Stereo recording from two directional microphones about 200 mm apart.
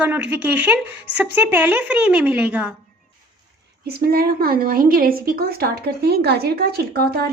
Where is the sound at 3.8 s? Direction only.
50° right (ahead or behind).